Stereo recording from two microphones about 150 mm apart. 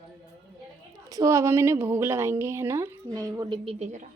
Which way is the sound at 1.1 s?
20° right (ahead or behind).